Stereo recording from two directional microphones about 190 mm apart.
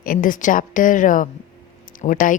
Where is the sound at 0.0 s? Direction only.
45° left (ahead or behind).